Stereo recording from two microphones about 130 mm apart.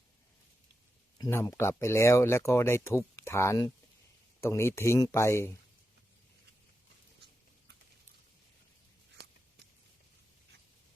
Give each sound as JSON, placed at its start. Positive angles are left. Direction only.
{"t": 1.2, "sound": "speech", "side_deg": 20}